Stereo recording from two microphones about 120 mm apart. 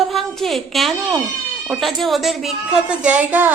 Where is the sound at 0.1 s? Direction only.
Centre (ahead or behind).